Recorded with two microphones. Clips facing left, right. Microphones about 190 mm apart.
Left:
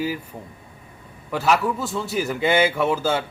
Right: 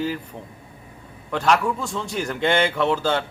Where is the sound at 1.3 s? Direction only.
5° left (ahead or behind).